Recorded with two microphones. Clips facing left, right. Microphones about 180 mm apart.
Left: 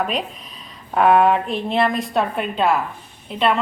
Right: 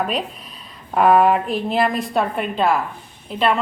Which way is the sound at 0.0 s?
Centre (ahead or behind).